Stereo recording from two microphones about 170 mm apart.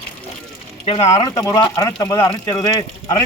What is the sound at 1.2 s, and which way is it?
Speech, 20° left (ahead or behind).